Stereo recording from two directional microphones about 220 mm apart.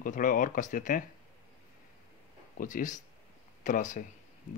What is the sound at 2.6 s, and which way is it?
Speech, 35° left (ahead or behind).